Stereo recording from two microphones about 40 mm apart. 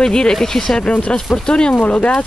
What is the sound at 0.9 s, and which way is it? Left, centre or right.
Speech, left.